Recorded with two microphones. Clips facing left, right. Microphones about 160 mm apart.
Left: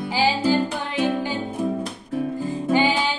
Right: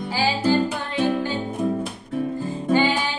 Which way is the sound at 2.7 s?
15° left (ahead or behind).